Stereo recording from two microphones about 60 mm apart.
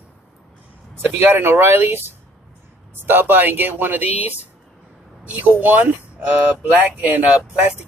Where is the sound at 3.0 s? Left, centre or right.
Right.